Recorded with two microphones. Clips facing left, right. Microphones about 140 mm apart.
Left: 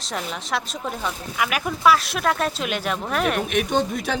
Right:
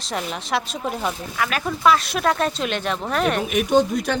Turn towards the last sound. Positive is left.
turn(degrees=0)  # may be behind; listen again after turning